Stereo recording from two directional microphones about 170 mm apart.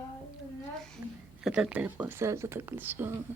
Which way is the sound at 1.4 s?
5° right (ahead or behind).